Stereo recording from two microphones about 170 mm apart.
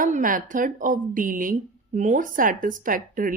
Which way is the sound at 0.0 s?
50° right (ahead or behind).